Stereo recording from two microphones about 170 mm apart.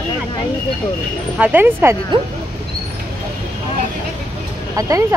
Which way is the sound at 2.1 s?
30° right (ahead or behind).